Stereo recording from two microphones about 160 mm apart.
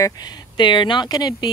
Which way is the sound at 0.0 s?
25° left (ahead or behind).